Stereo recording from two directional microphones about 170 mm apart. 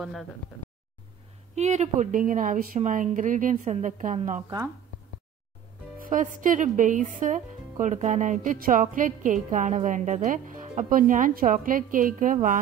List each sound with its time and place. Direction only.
0.0 s speech: centre (ahead or behind)
1.5 s speech: 40° right (ahead or behind)
5.9 s speech: 50° right (ahead or behind)